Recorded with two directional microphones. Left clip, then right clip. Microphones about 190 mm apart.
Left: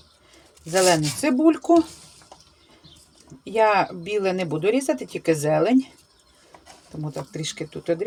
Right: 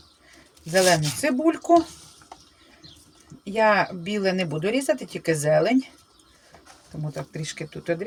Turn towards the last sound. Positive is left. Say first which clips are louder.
# left 3 dB
turn(degrees=20)  # may be behind; listen again after turning